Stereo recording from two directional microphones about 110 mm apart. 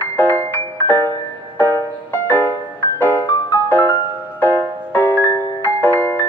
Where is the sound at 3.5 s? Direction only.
20° left (ahead or behind).